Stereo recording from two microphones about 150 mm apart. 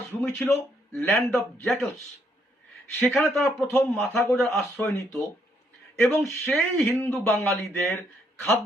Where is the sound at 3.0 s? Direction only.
Centre (ahead or behind).